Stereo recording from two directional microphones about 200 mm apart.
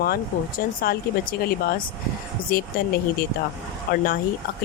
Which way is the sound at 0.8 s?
45° left (ahead or behind).